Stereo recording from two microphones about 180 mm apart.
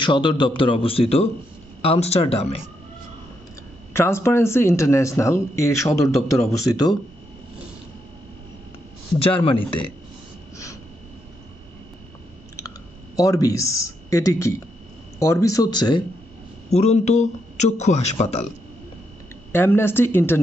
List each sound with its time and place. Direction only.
0.0 s a man's voice: 25° left (ahead or behind)
3.9 s a man's voice: 15° left (ahead or behind)
9.2 s a man's voice: 30° left (ahead or behind)
12.5 s clicking: 20° left (ahead or behind)
15.1 s a man's voice: 15° left (ahead or behind)
16.7 s speech: 40° left (ahead or behind)
19.5 s a man's voice: 10° left (ahead or behind)